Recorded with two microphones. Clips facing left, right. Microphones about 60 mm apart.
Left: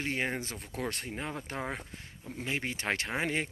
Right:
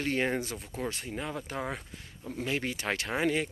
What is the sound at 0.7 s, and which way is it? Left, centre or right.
Speech, left.